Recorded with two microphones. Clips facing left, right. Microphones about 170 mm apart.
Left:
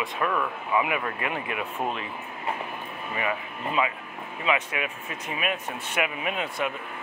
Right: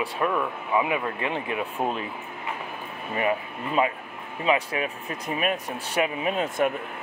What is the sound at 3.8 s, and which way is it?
Speech, 40° right (ahead or behind).